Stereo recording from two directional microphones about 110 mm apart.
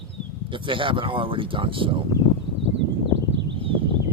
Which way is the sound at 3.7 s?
50° right (ahead or behind).